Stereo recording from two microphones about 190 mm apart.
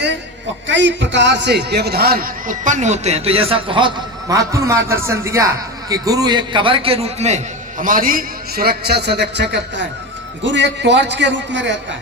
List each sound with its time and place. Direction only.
0.7 s a man's voice: 70° right (ahead or behind)